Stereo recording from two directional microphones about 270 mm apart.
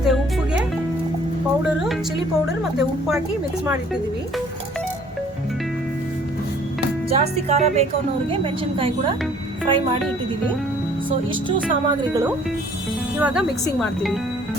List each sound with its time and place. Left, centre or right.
7.1 s speech: right
9.6 s speech: centre
11.4 s speech: centre
13.1 s speech: centre